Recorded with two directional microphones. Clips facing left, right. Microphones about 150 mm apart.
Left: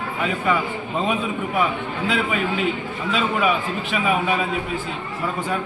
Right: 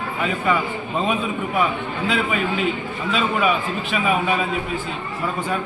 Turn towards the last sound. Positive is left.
turn(degrees=5)  # may be behind; listen again after turning